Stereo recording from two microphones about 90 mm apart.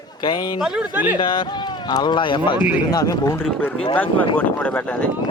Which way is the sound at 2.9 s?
40° left (ahead or behind).